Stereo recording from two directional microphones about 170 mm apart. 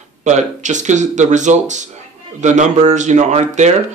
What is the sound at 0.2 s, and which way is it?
Speech, 45° right (ahead or behind).